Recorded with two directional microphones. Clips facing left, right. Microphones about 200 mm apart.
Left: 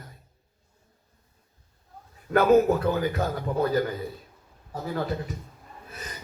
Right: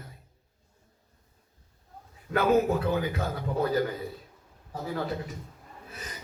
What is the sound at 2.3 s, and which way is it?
Speech, 40° left (ahead or behind).